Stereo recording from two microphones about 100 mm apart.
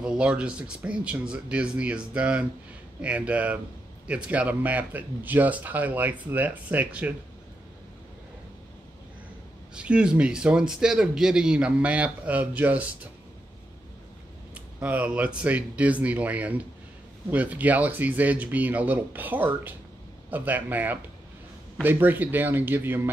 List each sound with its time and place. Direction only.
0.0 s a man's voice: 10° right (ahead or behind)
9.8 s a man's voice: 10° right (ahead or behind)
14.5 s a man's voice: 15° right (ahead or behind)